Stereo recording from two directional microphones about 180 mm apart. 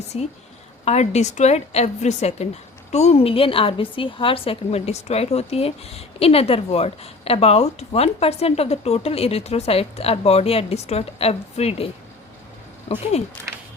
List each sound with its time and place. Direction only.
0.9 s a woman's voice: 40° left (ahead or behind)
12.9 s a woman's voice: 35° left (ahead or behind)